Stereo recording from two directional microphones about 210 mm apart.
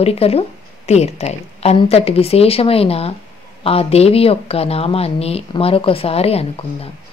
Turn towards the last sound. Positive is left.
turn(degrees=30)  # may be behind; listen again after turning